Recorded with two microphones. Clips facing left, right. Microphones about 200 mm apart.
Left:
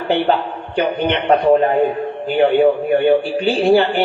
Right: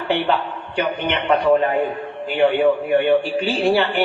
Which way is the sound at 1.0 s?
35° left (ahead or behind).